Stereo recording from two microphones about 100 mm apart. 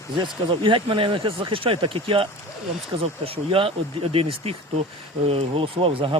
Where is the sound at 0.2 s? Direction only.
55° right (ahead or behind).